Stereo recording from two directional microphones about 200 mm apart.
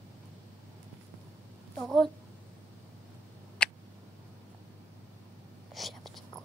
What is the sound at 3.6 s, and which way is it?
Tick, 5° left (ahead or behind).